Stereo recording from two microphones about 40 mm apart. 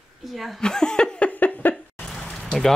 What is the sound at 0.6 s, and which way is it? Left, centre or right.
Speech, centre.